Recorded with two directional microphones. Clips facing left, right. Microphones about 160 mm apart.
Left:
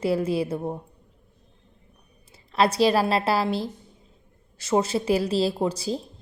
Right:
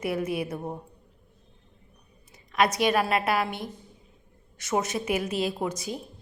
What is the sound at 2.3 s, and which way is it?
A woman's voice, 30° left (ahead or behind).